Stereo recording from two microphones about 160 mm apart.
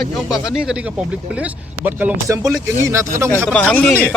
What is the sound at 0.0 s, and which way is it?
Speech, centre (ahead or behind).